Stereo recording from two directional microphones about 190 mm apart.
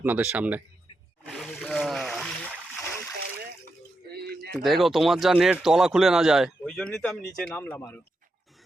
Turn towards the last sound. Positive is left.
turn(degrees=10)  # may be behind; listen again after turning